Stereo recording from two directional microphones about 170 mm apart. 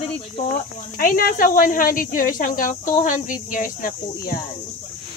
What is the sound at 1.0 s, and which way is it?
Speech, 60° left (ahead or behind).